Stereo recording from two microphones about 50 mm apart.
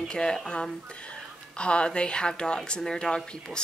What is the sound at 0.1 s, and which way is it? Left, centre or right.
A woman's voice, centre.